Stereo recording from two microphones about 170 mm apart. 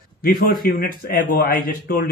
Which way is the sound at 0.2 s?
55° left (ahead or behind).